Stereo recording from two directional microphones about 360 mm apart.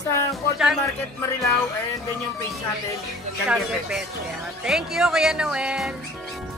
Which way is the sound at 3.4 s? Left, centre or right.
Centre.